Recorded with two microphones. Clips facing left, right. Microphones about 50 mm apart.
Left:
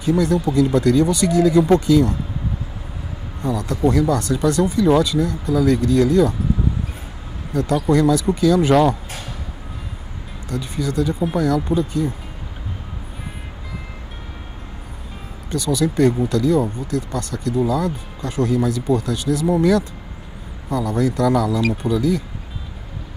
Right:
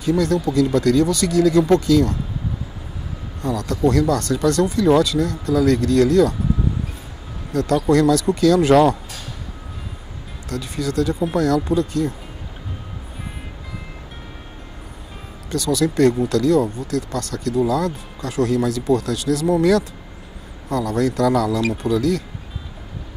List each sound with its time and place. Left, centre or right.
0.0 s speech: centre
3.4 s speech: centre
7.5 s speech: centre
10.5 s speech: centre
15.5 s speech: centre